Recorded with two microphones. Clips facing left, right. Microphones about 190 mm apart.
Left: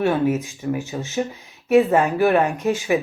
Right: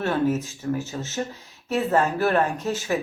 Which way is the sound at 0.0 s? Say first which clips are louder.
Left 3 dB; 15° left (ahead or behind).